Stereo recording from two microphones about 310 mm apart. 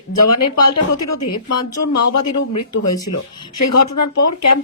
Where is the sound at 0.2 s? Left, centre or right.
Left.